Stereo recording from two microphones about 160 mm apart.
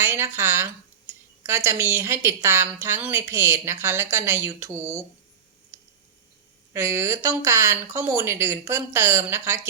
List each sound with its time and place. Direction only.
0.0 s a woman's voice: 15° right (ahead or behind)
6.7 s a woman's voice: 15° right (ahead or behind)